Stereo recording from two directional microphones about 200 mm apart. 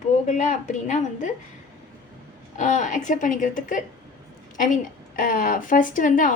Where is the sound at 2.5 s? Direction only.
40° left (ahead or behind).